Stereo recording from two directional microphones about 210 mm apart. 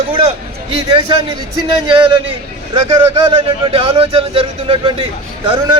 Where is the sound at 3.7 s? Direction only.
25° right (ahead or behind).